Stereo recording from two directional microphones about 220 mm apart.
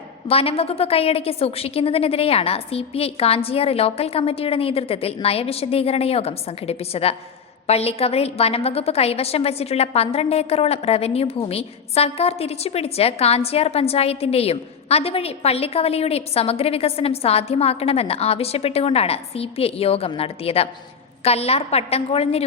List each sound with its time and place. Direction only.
0.3 s a woman's voice: 25° left (ahead or behind)